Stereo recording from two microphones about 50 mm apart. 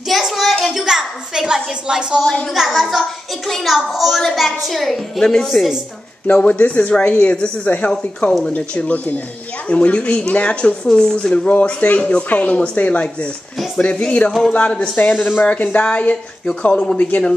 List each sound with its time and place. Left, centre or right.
0.1 s hands: centre
0.8 s a child's voice: centre
6.2 s speech: left
7.6 s a woman's voice: left
10.9 s speech: centre
11.3 s speech: left